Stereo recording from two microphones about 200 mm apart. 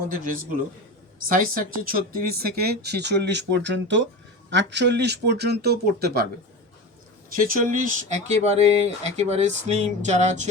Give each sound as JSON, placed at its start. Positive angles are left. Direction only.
{"t": 0.1, "sound": "a man's voice", "side_deg": -45}
{"t": 7.3, "sound": "speech", "side_deg": -45}